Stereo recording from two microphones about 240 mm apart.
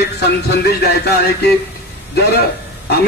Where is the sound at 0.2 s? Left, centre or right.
Left.